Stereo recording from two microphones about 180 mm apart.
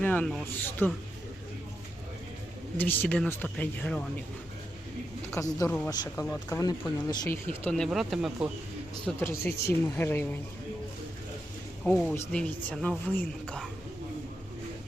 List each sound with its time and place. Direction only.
0.0 s speech: 10° left (ahead or behind)
2.7 s speech: 10° left (ahead or behind)
5.4 s speech: 15° left (ahead or behind)
6.2 s speech: 10° left (ahead or behind)
7.6 s speech: 5° left (ahead or behind)
9.0 s speech: 15° left (ahead or behind)
12.1 s speech: 10° left (ahead or behind)